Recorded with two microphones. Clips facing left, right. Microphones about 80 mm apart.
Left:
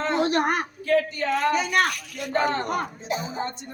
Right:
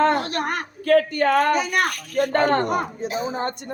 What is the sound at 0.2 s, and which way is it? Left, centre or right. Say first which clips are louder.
Speech: left 3 dB; left.